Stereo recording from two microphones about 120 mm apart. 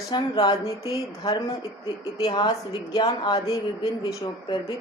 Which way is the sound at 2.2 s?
35° left (ahead or behind).